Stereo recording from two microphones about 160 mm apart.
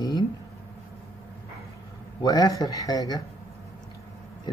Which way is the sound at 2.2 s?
20° left (ahead or behind).